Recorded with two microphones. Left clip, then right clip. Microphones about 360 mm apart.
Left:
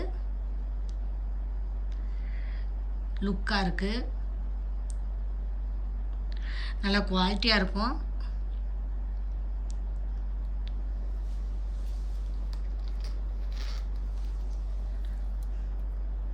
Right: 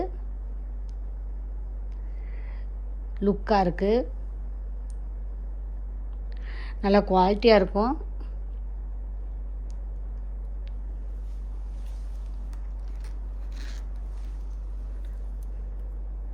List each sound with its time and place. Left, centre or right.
3.2 s a woman's voice: centre
6.4 s speech: centre